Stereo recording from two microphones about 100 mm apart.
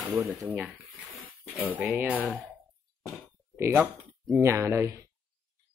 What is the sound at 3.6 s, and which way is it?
Speech, 20° right (ahead or behind).